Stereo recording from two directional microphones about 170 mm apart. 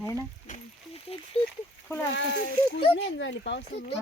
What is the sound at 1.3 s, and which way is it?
Speech, 35° left (ahead or behind).